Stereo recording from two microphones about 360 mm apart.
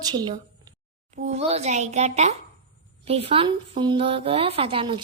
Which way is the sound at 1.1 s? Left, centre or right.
Centre.